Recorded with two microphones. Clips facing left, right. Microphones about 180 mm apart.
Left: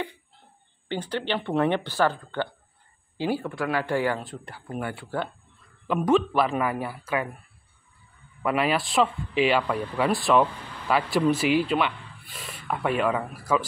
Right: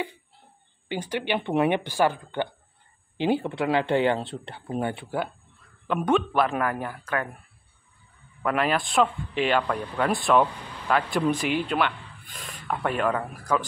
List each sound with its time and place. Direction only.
0.8 s speech: 15° right (ahead or behind)
5.9 s speech: centre (ahead or behind)
8.4 s speech: 5° left (ahead or behind)